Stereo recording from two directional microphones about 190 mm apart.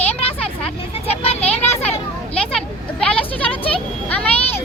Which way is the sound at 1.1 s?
30° left (ahead or behind).